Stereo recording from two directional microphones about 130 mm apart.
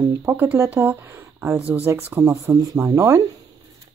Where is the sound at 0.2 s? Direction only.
15° right (ahead or behind).